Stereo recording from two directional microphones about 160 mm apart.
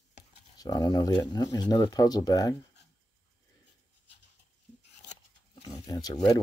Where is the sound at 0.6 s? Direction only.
25° left (ahead or behind).